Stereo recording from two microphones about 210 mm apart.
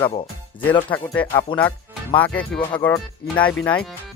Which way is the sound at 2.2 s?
5° left (ahead or behind).